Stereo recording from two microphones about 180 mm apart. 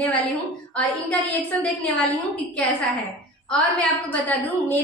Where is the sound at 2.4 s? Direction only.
10° left (ahead or behind).